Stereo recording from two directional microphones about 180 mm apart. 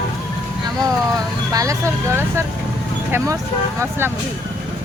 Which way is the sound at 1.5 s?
20° right (ahead or behind).